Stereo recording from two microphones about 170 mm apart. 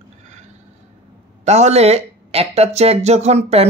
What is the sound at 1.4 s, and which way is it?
Speech, 40° right (ahead or behind).